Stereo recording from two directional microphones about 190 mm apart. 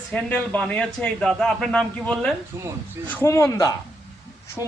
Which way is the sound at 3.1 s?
10° left (ahead or behind).